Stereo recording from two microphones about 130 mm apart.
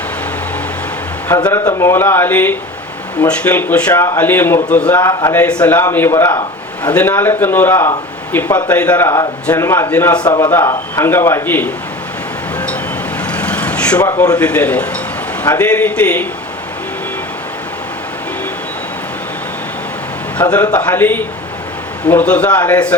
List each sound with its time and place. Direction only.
1.5 s a man's voice: 15° left (ahead or behind)
4.9 s a man's voice: 30° left (ahead or behind)
5.3 s a man's voice: 10° left (ahead or behind)
10.2 s a man's voice: 35° left (ahead or behind)
10.5 s a man's voice: 20° left (ahead or behind)
13.2 s vehicle: 10° left (ahead or behind)
14.3 s a man's voice: 10° left (ahead or behind)
20.4 s a man's voice: 10° left (ahead or behind)